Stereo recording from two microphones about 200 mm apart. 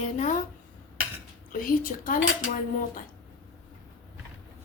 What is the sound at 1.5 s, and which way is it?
Speech, 45° left (ahead or behind).